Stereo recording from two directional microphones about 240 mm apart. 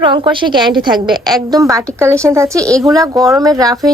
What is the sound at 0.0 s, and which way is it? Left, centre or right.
A woman's voice, centre.